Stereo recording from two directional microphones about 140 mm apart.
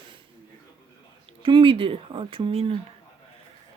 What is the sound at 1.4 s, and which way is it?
Speech, 40° right (ahead or behind).